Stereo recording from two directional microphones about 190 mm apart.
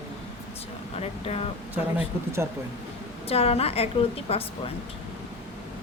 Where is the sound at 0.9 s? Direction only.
35° left (ahead or behind).